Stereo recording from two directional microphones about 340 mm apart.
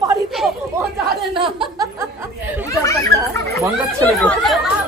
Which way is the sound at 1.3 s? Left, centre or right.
Centre.